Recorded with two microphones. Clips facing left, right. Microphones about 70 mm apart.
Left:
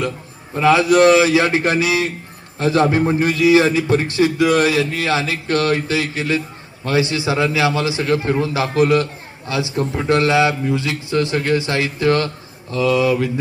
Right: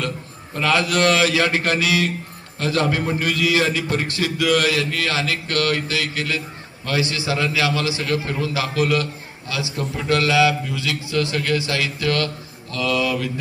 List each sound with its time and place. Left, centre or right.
0.5 s a man's voice: centre